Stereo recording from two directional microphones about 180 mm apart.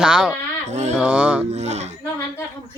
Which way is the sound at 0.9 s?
5° right (ahead or behind).